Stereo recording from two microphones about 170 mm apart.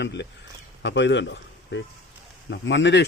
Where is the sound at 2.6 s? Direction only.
90° left.